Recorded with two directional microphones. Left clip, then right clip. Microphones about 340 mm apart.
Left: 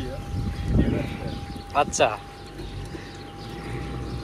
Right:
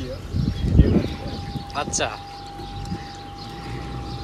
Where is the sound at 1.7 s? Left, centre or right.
Centre.